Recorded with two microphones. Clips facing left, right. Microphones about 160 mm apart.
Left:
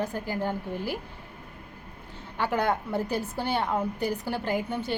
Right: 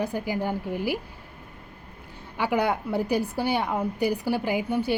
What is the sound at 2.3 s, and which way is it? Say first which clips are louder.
A woman's voice: right 2 dB; 10° right (ahead or behind).